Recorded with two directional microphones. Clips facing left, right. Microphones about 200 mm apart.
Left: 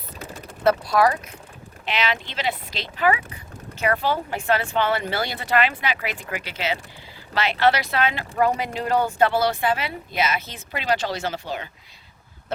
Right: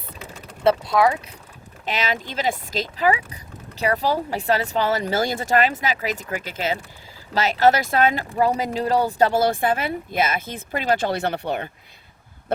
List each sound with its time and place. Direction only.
0.6 s speech: 25° right (ahead or behind)
1.8 s a woman's voice: 45° right (ahead or behind)